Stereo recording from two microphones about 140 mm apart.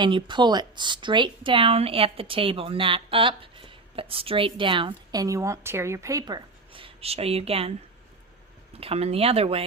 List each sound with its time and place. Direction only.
0.0 s speech: 35° right (ahead or behind)
5.2 s a woman's voice: 20° right (ahead or behind); by 7.7 s 45° right (ahead or behind)
8.8 s speech: 45° right (ahead or behind)